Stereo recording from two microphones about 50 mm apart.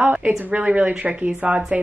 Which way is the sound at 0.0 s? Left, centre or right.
Right.